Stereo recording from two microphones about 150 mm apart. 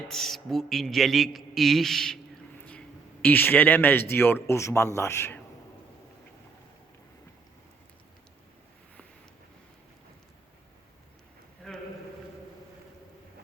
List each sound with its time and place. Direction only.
0.1 s a man's voice: centre (ahead or behind)
2.6 s a sound: 10° left (ahead or behind)
4.1 s speech: 15° left (ahead or behind)